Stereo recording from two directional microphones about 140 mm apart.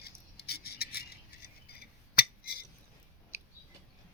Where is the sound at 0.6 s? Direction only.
90° left.